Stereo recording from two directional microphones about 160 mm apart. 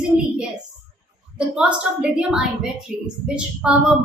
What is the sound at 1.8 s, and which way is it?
A woman's voice, 5° right (ahead or behind).